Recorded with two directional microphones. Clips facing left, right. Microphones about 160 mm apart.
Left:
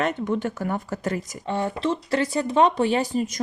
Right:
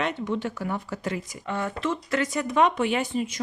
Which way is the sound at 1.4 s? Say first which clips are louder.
Left 3 dB; 30° left (ahead or behind).